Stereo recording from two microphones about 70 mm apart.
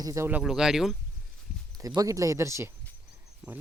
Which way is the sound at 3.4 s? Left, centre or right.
Centre.